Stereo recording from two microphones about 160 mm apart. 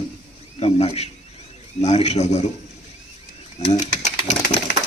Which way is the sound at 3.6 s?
45° left (ahead or behind).